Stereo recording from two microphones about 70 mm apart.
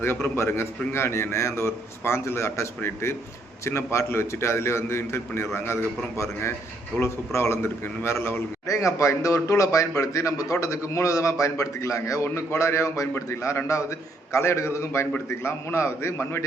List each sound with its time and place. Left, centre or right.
0.0 s a man's voice: left
7.0 s a man's voice: left
8.6 s a man's voice: left